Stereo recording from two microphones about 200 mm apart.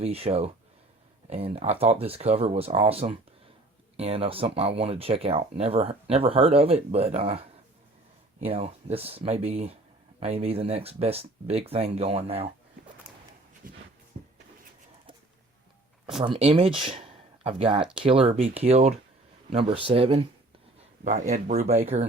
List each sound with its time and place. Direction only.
0.0 s speech: 30° right (ahead or behind)
8.4 s speech: 30° right (ahead or behind)
13.6 s a sound: 45° right (ahead or behind)
16.1 s speech: 30° right (ahead or behind)